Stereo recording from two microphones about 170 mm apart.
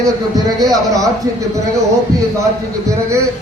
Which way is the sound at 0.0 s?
20° right (ahead or behind).